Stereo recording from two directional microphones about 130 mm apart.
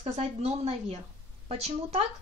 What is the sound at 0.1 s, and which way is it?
Speech, 55° right (ahead or behind).